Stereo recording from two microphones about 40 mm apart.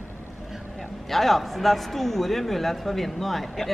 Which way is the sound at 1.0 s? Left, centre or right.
Centre.